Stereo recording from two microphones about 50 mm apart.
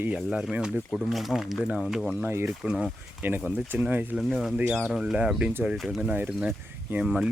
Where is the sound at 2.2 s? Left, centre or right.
Right.